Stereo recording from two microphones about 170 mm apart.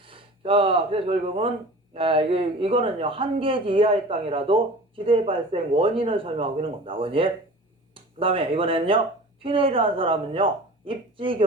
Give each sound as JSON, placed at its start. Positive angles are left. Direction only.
{"t": 0.0, "sound": "speech", "side_deg": -30}